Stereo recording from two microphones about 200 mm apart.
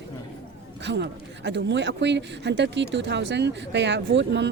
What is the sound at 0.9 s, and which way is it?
Speech, 60° right (ahead or behind).